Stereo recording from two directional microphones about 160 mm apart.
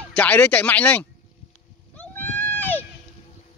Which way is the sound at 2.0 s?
10° left (ahead or behind).